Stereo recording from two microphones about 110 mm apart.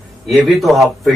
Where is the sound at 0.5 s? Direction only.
Centre (ahead or behind).